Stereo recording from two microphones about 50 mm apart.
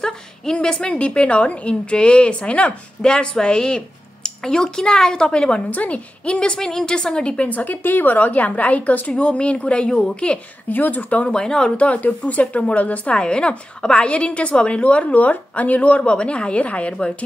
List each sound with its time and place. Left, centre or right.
0.6 s a woman's voice: left
7.2 s a woman's voice: left
10.7 s a woman's voice: left
11.2 s speech: centre
11.7 s a woman's voice: left